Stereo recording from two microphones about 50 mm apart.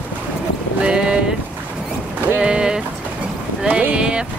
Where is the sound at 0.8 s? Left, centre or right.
Centre.